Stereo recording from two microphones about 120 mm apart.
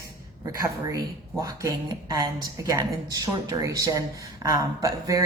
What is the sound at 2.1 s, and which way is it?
A woman's voice, 30° right (ahead or behind).